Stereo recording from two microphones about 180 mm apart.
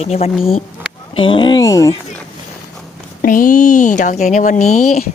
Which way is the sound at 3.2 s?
50° left (ahead or behind).